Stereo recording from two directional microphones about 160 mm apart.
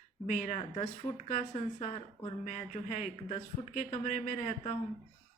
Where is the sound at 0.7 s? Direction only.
35° left (ahead or behind).